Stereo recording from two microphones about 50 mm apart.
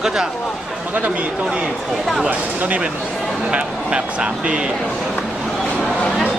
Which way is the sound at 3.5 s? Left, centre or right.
Right.